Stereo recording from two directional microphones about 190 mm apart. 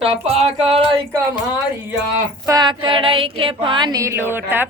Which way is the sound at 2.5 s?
20° right (ahead or behind).